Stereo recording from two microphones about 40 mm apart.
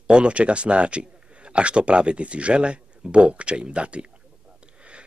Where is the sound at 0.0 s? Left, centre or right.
Right.